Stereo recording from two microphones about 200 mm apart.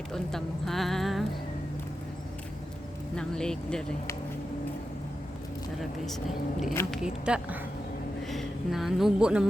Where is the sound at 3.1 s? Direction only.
5° left (ahead or behind).